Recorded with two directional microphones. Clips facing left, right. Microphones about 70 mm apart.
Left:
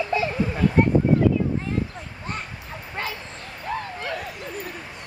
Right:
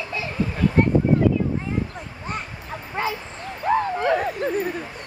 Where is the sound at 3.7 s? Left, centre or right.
Right.